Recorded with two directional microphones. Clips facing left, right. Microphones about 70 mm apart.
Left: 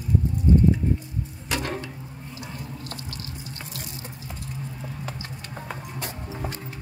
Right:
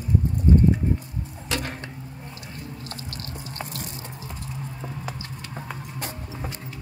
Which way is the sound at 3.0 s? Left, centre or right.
Right.